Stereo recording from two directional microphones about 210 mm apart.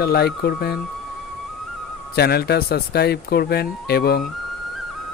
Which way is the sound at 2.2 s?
50° left (ahead or behind).